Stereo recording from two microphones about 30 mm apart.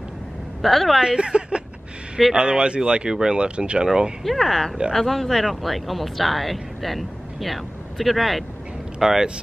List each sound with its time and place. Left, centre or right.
0.6 s speech: centre
1.0 s speech: right
3.3 s speech: right
3.8 s speech: right
4.2 s speech: centre